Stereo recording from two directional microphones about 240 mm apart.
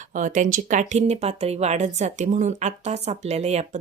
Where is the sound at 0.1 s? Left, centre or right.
Right.